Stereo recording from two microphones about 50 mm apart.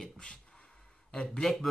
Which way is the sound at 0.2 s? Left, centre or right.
Centre.